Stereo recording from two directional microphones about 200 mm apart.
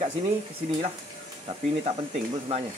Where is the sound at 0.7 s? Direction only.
30° right (ahead or behind).